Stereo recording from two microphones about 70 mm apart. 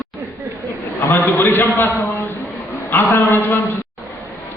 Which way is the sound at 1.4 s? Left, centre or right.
Left.